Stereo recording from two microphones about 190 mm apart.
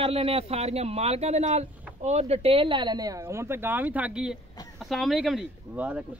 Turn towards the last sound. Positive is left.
turn(degrees=-10)  # may be behind; listen again after turning